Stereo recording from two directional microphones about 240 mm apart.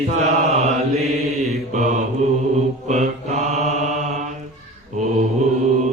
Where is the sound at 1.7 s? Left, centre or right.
Right.